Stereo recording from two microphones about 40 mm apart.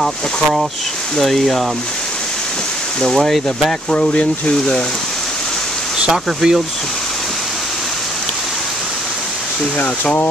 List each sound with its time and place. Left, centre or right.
1.1 s speech: centre
3.0 s speech: centre
3.9 s speech: left
5.9 s speech: centre